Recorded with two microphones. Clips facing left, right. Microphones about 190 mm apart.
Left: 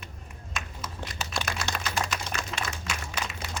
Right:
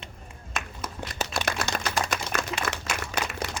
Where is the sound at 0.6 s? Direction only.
60° right (ahead or behind).